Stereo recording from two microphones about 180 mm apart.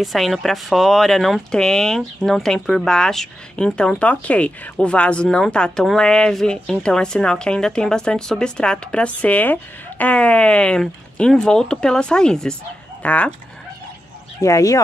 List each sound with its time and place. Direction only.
0.0 s speech: centre (ahead or behind)
14.4 s speech: 20° left (ahead or behind)